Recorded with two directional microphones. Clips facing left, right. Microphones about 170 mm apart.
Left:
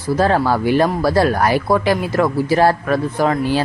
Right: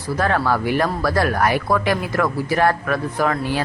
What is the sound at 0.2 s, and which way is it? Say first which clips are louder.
Speech: left 3 dB; 30° left (ahead or behind).